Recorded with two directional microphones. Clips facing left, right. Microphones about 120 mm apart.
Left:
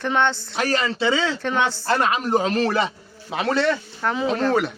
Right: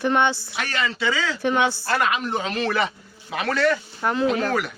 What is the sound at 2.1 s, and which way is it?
A man's voice, 40° left (ahead or behind).